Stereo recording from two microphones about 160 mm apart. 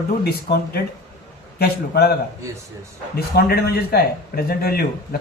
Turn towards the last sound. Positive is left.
turn(degrees=75)  # may be behind; listen again after turning